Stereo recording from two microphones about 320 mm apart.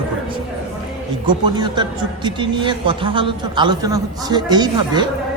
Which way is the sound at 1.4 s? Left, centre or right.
Centre.